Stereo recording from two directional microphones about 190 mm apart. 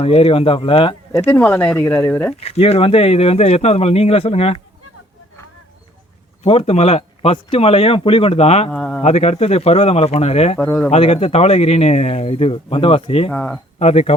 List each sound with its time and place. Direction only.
0.0 s speech: 30° left (ahead or behind)
1.2 s speech: 10° left (ahead or behind)
2.4 s speech: 30° left (ahead or behind)
6.4 s speech: 30° left (ahead or behind)
8.7 s speech: 5° left (ahead or behind)
9.0 s speech: 35° left (ahead or behind)
10.6 s speech: 10° left (ahead or behind)
10.9 s speech: 30° left (ahead or behind)
13.3 s speech: 10° left (ahead or behind)
13.7 s speech: 35° left (ahead or behind)